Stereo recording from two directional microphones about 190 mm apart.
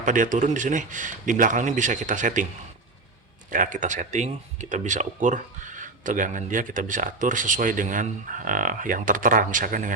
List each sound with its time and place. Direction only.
0.0 s speech: 45° right (ahead or behind)
3.5 s speech: 45° right (ahead or behind)